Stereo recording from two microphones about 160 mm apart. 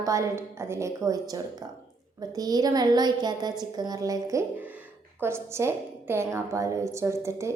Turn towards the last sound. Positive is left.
turn(degrees=-15)  # may be behind; listen again after turning